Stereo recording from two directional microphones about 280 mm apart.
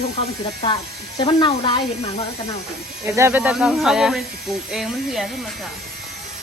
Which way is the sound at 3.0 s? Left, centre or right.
Centre.